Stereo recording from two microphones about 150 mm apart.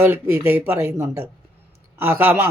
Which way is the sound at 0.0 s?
15° right (ahead or behind).